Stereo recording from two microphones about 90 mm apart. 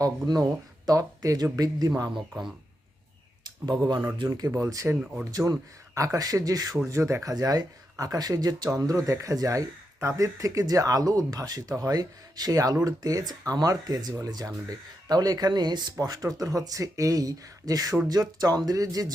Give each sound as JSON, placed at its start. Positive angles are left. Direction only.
{"t": 0.0, "sound": "speech", "side_deg": -40}
{"t": 3.4, "sound": "speech", "side_deg": -55}
{"t": 4.3, "sound": "speech", "side_deg": -40}
{"t": 6.8, "sound": "speech", "side_deg": -30}
{"t": 16.0, "sound": "speech", "side_deg": -40}